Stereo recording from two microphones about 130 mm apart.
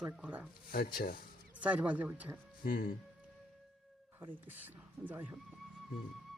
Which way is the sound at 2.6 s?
90° left.